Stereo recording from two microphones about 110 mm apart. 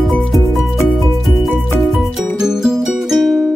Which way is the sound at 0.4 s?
25° right (ahead or behind).